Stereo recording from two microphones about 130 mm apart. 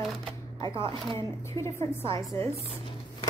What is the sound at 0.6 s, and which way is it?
Speech, 40° right (ahead or behind).